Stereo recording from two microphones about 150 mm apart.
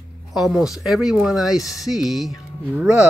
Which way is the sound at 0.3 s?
Centre (ahead or behind).